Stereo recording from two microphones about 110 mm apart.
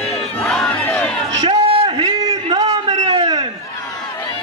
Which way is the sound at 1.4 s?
55° right (ahead or behind).